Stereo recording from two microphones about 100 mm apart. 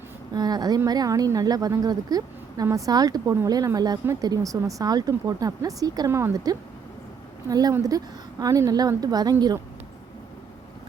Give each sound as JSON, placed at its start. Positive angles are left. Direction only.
{"t": 0.3, "sound": "speech", "side_deg": -40}
{"t": 6.1, "sound": "speech", "side_deg": -25}
{"t": 6.3, "sound": "a woman's voice", "side_deg": -40}